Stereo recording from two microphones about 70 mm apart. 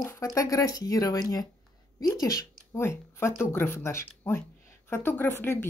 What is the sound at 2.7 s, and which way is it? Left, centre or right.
Speech, left.